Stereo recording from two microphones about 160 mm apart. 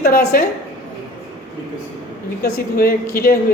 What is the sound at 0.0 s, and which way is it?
Speech, 65° left (ahead or behind).